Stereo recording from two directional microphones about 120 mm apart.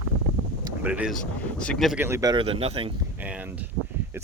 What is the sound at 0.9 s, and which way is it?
Speech, 10° right (ahead or behind).